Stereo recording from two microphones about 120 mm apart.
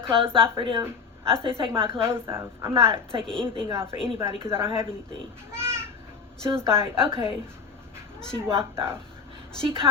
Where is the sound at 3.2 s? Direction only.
5° left (ahead or behind).